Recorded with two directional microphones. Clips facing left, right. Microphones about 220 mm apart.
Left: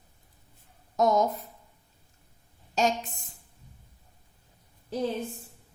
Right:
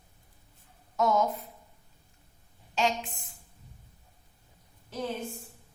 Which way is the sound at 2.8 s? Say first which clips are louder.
Left 2 dB; 40° left (ahead or behind).